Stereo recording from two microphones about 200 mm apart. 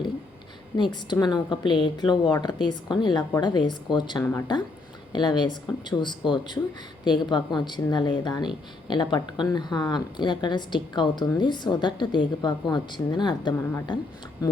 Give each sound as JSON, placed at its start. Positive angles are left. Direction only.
{"t": 0.8, "sound": "a woman's voice", "side_deg": 20}
{"t": 4.2, "sound": "a woman's voice", "side_deg": 10}
{"t": 5.1, "sound": "a woman's voice", "side_deg": 20}